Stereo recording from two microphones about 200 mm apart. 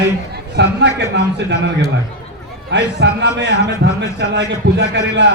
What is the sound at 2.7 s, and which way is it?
A man's voice, 60° right (ahead or behind).